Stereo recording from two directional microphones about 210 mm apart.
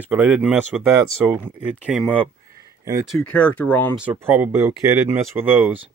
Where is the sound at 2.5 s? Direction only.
15° right (ahead or behind).